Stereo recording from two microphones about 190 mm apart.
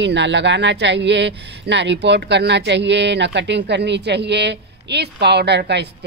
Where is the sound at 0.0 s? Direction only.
65° right (ahead or behind).